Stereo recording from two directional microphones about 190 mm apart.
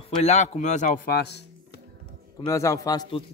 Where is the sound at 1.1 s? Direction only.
60° left (ahead or behind).